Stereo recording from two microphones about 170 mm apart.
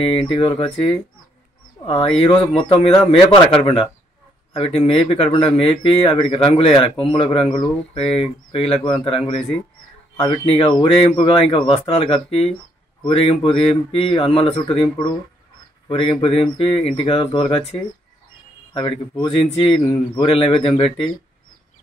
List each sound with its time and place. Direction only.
0.3 s a man's voice: 30° left (ahead or behind)